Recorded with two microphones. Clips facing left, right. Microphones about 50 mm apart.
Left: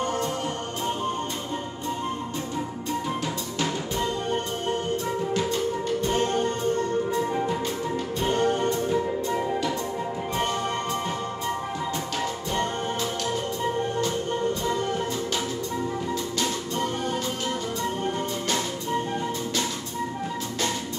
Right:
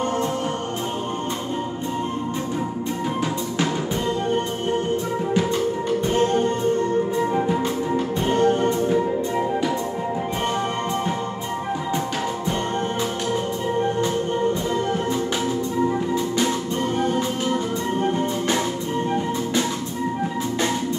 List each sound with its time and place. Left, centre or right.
6.1 s music: centre
8.4 s music: centre
8.6 s music: right